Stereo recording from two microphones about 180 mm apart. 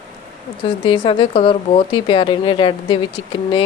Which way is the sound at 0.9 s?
30° left (ahead or behind).